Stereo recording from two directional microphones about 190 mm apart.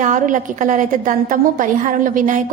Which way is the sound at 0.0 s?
40° right (ahead or behind).